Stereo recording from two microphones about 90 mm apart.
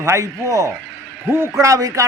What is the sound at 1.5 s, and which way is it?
Speech, 35° right (ahead or behind).